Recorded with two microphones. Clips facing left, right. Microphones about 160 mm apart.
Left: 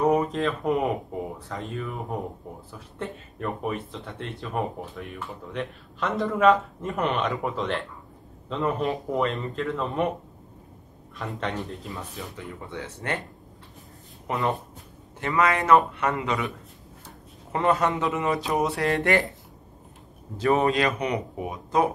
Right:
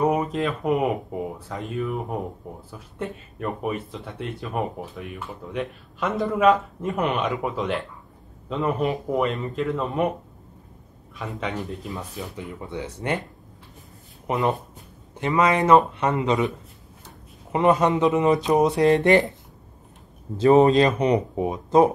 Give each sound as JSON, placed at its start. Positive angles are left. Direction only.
{"t": 0.0, "sound": "speech", "side_deg": -10}
{"t": 11.1, "sound": "speech", "side_deg": -5}
{"t": 12.4, "sound": "speech", "side_deg": -15}
{"t": 14.2, "sound": "speech", "side_deg": -20}
{"t": 20.3, "sound": "speech", "side_deg": -25}